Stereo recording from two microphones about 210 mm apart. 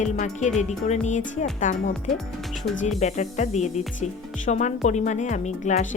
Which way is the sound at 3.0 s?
35° left (ahead or behind).